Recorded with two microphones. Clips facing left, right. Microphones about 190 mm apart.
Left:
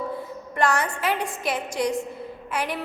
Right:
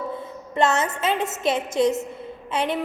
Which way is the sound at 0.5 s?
25° right (ahead or behind).